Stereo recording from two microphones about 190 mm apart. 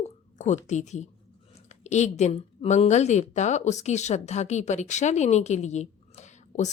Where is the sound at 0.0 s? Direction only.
40° left (ahead or behind).